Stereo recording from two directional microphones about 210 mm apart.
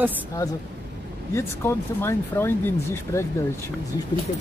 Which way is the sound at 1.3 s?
10° left (ahead or behind).